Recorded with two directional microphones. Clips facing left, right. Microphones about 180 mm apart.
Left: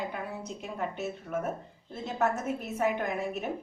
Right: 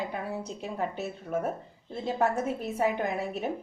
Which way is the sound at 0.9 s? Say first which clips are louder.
Right 2 dB; 35° right (ahead or behind).